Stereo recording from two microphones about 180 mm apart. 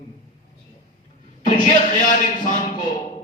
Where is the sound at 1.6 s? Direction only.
45° left (ahead or behind).